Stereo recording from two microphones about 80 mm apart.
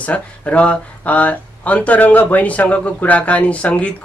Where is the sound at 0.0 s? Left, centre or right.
Centre.